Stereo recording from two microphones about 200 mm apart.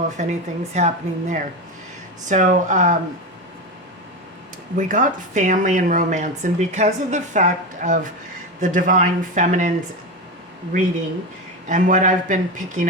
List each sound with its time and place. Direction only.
0.2 s speech: 35° right (ahead or behind)
4.8 s speech: 40° right (ahead or behind)
11.7 s speech: 40° right (ahead or behind)